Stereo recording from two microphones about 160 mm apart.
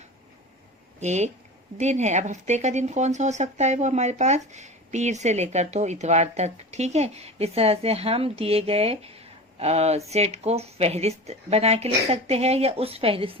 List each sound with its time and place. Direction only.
0.9 s speech: 45° right (ahead or behind)